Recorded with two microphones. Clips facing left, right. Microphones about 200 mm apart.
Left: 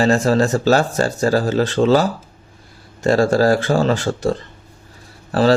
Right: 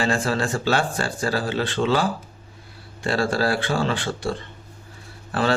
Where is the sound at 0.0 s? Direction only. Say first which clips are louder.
Left 8 dB; 40° left (ahead or behind).